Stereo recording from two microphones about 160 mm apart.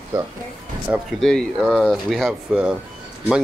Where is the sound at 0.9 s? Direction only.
Centre (ahead or behind).